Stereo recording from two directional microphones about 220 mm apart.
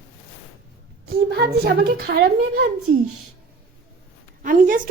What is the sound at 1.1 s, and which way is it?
A woman's voice, 45° right (ahead or behind).